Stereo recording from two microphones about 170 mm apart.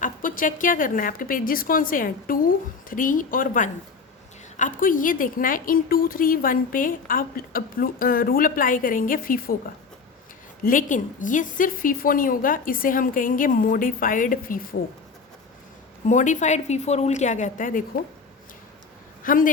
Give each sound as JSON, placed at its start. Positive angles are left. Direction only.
{"t": 0.0, "sound": "a woman's voice", "side_deg": 50}
{"t": 10.6, "sound": "a woman's voice", "side_deg": 55}
{"t": 16.0, "sound": "a woman's voice", "side_deg": 45}
{"t": 19.2, "sound": "speech", "side_deg": 55}